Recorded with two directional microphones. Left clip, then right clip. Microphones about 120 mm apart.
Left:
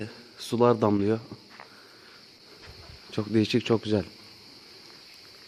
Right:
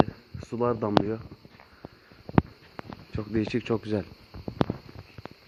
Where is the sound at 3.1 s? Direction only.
20° left (ahead or behind).